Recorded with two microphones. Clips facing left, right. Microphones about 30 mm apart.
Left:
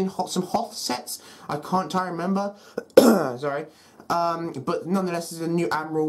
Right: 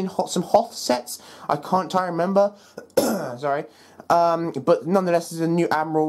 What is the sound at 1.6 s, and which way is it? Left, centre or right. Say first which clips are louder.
Speech: right 1 dB; right.